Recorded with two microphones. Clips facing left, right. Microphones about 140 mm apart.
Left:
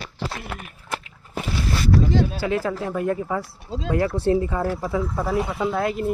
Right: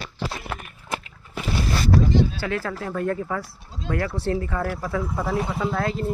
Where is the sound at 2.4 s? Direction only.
20° left (ahead or behind).